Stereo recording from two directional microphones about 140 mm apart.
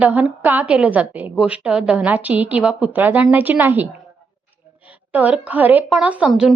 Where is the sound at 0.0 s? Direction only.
10° right (ahead or behind).